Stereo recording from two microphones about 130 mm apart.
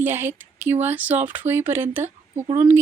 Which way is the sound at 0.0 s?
15° right (ahead or behind).